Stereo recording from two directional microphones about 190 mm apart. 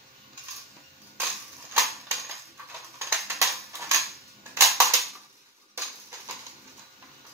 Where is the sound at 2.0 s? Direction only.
15° right (ahead or behind).